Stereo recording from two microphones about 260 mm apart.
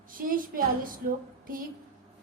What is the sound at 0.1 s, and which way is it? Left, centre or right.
Speech, right.